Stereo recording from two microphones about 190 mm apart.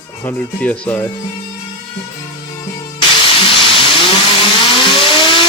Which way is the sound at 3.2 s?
30° left (ahead or behind).